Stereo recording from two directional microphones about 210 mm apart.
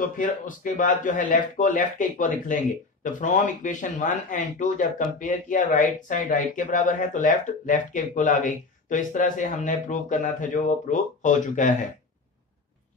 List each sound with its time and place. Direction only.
0.0 s speech: 40° left (ahead or behind)